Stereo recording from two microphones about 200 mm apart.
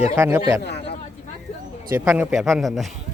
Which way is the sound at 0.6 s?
55° left (ahead or behind).